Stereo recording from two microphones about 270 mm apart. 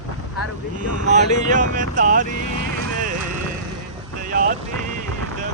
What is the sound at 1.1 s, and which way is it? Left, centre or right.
Speech, right.